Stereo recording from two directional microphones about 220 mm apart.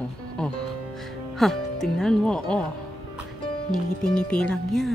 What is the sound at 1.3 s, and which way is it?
Speech, centre (ahead or behind).